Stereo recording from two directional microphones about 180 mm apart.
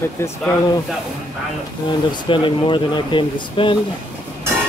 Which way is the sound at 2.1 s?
25° left (ahead or behind).